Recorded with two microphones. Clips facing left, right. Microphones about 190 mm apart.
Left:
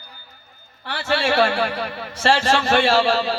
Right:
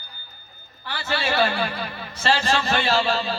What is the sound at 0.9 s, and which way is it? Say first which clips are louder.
A man's voice: left 5 dB; 70° left (ahead or behind).